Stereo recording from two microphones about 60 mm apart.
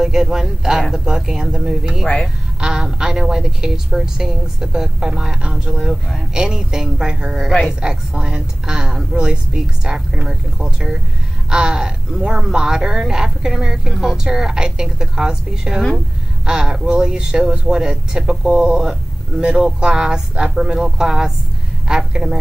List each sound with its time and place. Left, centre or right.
0.0 s a woman's voice: centre
18.5 s speech: right
18.8 s a woman's voice: centre